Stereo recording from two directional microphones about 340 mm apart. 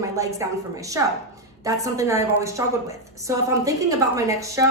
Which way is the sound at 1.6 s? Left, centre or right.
Centre.